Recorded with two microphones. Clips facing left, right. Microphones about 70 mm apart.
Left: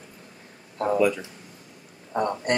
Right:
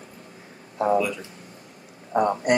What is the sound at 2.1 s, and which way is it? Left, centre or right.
Speech, centre.